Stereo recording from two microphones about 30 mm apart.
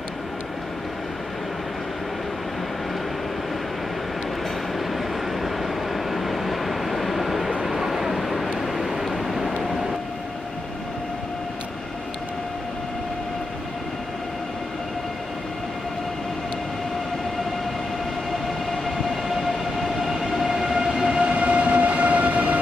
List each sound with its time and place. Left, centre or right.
4.7 s train: centre
7.6 s vehicle: centre
18.7 s train: centre
21.3 s train: right